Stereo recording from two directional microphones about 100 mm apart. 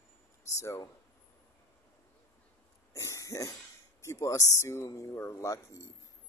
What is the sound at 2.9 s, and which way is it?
Speech, 30° left (ahead or behind).